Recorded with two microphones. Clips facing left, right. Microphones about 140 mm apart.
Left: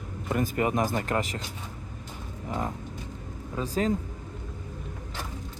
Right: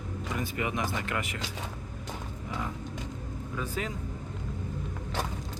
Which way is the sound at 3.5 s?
35° left (ahead or behind).